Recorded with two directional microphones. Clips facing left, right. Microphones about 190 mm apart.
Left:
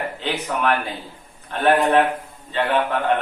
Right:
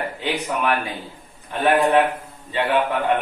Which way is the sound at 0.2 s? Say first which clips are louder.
Even; 10° right (ahead or behind).